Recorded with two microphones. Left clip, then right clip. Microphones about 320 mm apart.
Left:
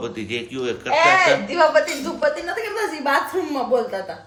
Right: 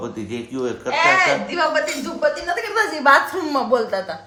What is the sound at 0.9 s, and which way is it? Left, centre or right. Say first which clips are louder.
A woman's voice: left 1 dB; centre.